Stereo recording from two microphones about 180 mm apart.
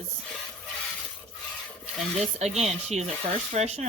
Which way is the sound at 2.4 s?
35° right (ahead or behind).